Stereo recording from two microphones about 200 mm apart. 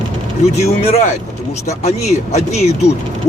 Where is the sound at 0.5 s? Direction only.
35° left (ahead or behind).